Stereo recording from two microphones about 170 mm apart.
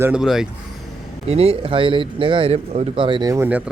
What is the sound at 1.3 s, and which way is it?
A man's voice, 35° right (ahead or behind).